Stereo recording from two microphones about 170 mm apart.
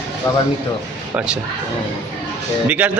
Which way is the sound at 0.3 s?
15° left (ahead or behind).